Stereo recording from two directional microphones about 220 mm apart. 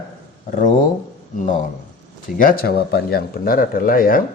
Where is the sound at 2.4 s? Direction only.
40° left (ahead or behind).